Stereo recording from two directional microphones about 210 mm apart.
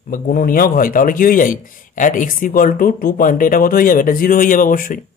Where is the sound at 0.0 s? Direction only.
40° left (ahead or behind).